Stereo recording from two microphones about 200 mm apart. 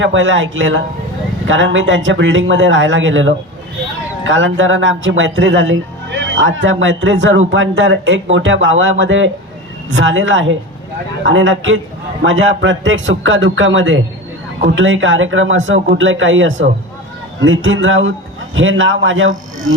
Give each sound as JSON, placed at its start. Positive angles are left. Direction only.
{"t": 0.0, "sound": "speech", "side_deg": -70}